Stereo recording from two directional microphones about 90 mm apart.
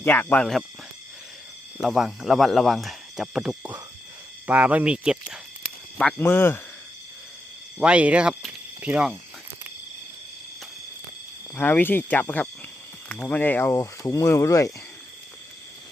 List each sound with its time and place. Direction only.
0.0 s speech: 20° left (ahead or behind)
1.8 s speech: centre (ahead or behind)
4.4 s speech: 15° right (ahead or behind)
6.1 s speech: 25° left (ahead or behind)
7.8 s speech: 15° right (ahead or behind)
11.5 s speech: 20° left (ahead or behind)